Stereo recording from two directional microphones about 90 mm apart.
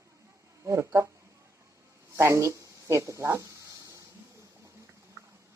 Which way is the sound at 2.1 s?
30° right (ahead or behind).